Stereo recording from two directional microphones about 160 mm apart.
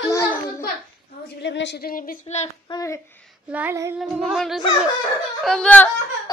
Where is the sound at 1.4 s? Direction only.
90° left; by 2.1 s 65° left (ahead or behind).